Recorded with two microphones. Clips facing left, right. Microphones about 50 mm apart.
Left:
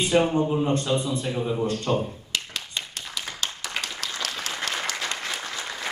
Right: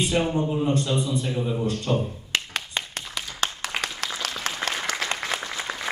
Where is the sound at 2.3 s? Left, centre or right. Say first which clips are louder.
Right 5 dB; right.